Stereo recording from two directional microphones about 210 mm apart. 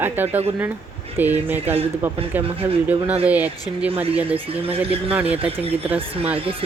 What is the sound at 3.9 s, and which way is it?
Speech, 30° right (ahead or behind).